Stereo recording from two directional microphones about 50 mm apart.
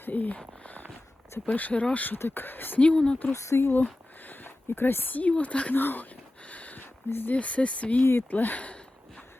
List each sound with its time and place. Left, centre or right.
0.0 s speech: left
0.3 s a sound: left
1.5 s speech: left
2.1 s speech: left
2.8 s speech: centre
3.3 s speech: left
3.6 s speech: left
4.2 s a sound: left
5.4 s speech: left
5.7 s speech: left
6.4 s a sound: left
7.1 s speech: left
7.3 s speech: left
8.3 s a sound: left